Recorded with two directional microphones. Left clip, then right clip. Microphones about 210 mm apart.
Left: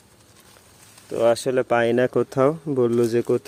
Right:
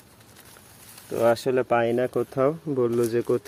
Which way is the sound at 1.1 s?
15° left (ahead or behind).